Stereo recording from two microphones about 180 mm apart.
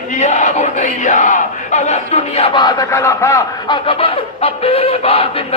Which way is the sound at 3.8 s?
30° left (ahead or behind).